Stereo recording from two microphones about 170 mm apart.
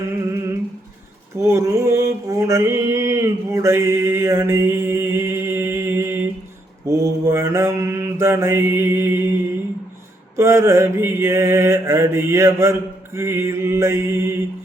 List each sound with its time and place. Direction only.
1.4 s mantra: 15° right (ahead or behind)
10.3 s mantra: 15° right (ahead or behind)